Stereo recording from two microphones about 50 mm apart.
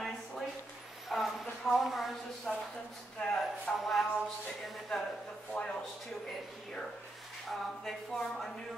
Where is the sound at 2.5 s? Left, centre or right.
Centre.